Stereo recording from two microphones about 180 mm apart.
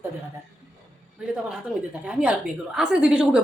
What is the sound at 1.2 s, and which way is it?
A woman's voice, 5° right (ahead or behind).